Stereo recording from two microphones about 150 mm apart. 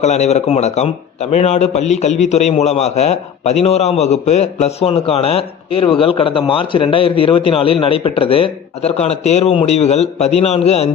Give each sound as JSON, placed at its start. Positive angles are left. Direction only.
{"t": 0.0, "sound": "a man's voice", "side_deg": 45}